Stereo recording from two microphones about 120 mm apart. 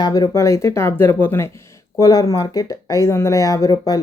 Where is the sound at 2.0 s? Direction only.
30° left (ahead or behind).